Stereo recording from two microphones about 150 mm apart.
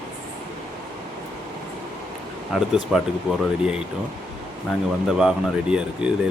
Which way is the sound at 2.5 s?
Centre (ahead or behind).